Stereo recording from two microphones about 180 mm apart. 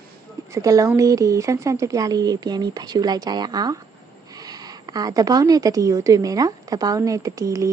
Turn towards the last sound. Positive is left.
turn(degrees=-20)  # may be behind; listen again after turning